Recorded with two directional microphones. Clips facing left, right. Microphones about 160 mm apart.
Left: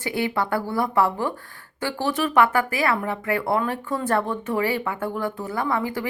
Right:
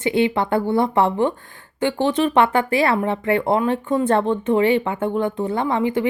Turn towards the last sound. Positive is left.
turn(degrees=-20)  # may be behind; listen again after turning